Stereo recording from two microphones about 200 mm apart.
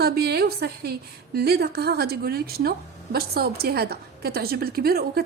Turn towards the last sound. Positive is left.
turn(degrees=-50)  # may be behind; listen again after turning